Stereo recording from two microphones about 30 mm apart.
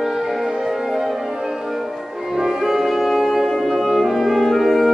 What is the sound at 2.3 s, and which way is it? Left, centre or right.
Music, centre.